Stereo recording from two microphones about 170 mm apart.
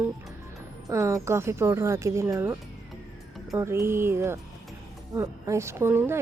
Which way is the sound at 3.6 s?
15° right (ahead or behind).